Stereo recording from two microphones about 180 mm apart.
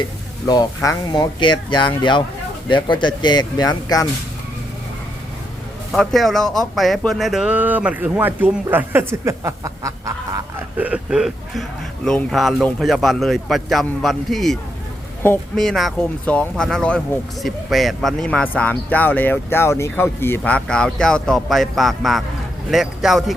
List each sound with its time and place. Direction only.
0.0 s speech: 25° left (ahead or behind)
5.9 s speech: centre (ahead or behind); by 9.9 s 15° right (ahead or behind)
10.8 s speech: 5° right (ahead or behind)